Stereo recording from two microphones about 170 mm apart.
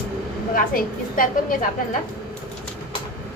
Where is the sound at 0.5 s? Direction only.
55° left (ahead or behind).